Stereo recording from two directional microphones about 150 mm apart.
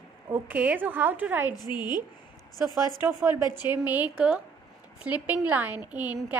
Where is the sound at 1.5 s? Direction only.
25° left (ahead or behind).